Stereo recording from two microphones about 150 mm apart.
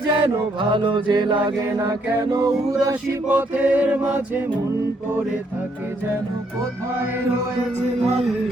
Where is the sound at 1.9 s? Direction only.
25° right (ahead or behind).